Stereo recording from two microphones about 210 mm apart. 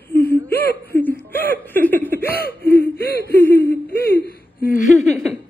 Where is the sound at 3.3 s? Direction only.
10° left (ahead or behind).